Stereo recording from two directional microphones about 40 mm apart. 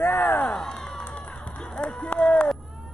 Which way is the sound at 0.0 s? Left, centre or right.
Left.